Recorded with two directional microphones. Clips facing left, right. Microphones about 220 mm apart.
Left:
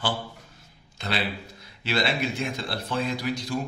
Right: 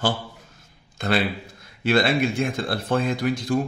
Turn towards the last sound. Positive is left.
turn(degrees=-50)  # may be behind; listen again after turning